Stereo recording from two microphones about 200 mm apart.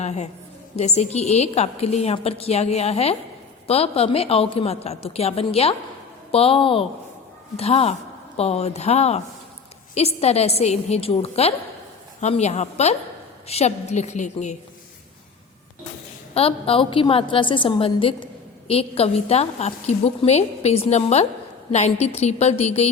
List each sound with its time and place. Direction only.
0.0 s a woman's voice: 35° left (ahead or behind)
16.3 s a woman's voice: 30° left (ahead or behind)